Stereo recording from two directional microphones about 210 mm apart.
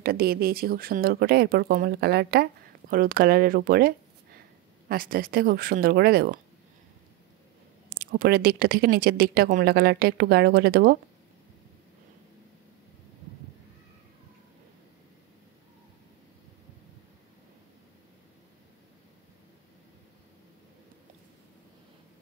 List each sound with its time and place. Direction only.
0.0 s speech: 45° right (ahead or behind)
8.0 s speech: 45° right (ahead or behind)